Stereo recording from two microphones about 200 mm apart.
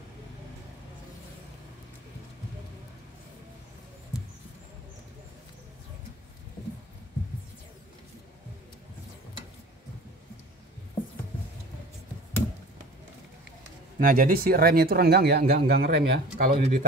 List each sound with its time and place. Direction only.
13.9 s speech: 45° right (ahead or behind)